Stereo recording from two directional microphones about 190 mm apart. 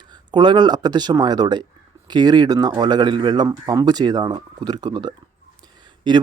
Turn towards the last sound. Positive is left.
turn(degrees=-25)  # may be behind; listen again after turning